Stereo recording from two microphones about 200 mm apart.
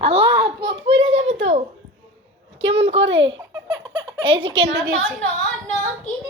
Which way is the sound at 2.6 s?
30° right (ahead or behind).